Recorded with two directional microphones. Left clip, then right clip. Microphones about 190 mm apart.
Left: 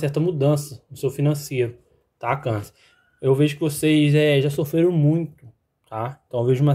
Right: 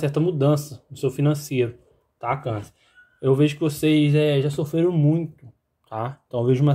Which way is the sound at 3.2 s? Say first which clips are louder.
Even; 5° left (ahead or behind).